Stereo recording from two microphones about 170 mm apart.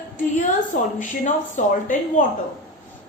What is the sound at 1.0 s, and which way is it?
A woman's voice, 50° left (ahead or behind).